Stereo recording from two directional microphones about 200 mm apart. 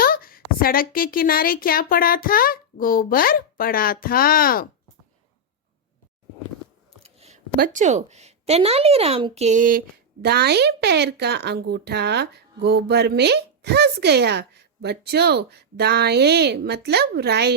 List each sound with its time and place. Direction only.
0.0 s a woman's voice: 45° left (ahead or behind)
7.0 s a sound: 30° right (ahead or behind)
7.6 s speech: 40° right (ahead or behind); by 17.5 s 55° right (ahead or behind)